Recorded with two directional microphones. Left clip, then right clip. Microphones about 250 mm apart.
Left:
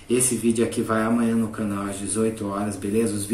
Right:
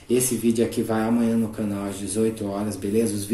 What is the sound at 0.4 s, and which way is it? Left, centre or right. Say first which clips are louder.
Speech: even; centre.